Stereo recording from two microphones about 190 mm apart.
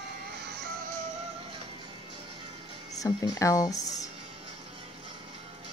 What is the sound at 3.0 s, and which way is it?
Speech, 15° left (ahead or behind).